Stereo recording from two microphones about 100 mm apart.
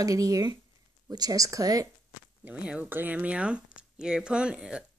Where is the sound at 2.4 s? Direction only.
10° right (ahead or behind).